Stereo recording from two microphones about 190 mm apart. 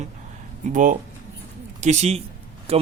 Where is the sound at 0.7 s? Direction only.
45° right (ahead or behind).